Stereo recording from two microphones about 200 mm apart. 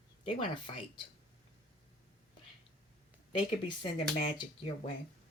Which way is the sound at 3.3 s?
25° left (ahead or behind).